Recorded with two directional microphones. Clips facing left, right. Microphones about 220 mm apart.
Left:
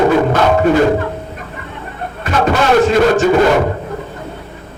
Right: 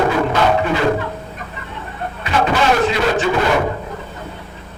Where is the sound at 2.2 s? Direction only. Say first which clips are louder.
Left 2 dB; 45° left (ahead or behind).